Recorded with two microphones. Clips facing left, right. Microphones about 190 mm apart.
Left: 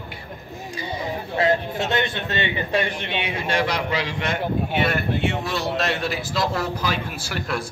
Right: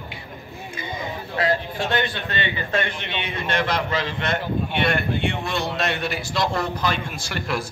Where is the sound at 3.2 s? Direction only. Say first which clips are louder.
Left 1 dB; 10° left (ahead or behind).